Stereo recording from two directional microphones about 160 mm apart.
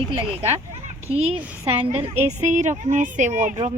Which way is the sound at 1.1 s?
40° right (ahead or behind).